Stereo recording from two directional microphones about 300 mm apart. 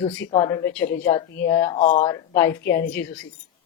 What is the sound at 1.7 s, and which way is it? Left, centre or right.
Speech, left.